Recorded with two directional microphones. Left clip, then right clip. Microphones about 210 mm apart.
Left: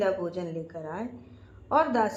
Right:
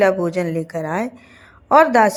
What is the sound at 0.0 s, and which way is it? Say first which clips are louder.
A woman's voice: right 12 dB; 35° right (ahead or behind).